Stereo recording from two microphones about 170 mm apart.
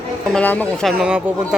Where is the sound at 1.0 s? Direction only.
5° right (ahead or behind).